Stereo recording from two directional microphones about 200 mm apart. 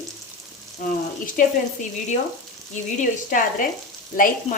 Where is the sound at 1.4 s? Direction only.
40° left (ahead or behind).